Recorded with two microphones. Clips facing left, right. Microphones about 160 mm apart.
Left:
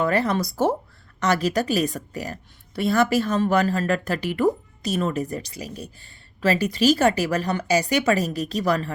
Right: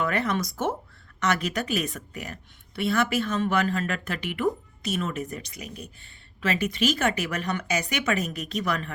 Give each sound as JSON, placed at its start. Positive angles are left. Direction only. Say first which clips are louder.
{"t": 0.0, "sound": "a woman's voice", "louder": "left 5 dB", "side_deg": 35}